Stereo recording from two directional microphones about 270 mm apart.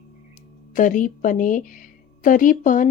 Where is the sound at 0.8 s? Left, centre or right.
Left.